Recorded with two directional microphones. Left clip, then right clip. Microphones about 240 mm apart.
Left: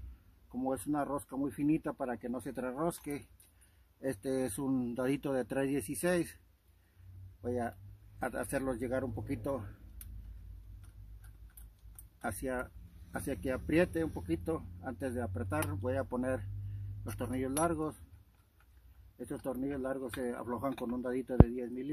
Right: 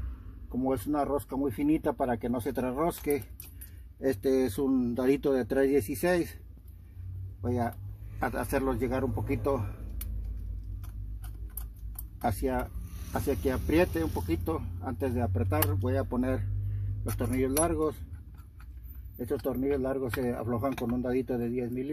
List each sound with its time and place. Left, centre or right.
0.7 s speech: left
7.4 s speech: left
12.2 s speech: left
19.1 s speech: left